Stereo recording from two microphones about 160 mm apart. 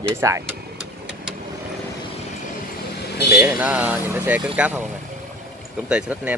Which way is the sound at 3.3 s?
10° right (ahead or behind).